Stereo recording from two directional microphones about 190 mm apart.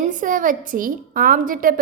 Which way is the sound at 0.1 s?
45° right (ahead or behind).